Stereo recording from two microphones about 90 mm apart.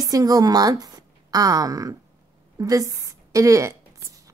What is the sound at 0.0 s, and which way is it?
A woman's voice, 40° right (ahead or behind).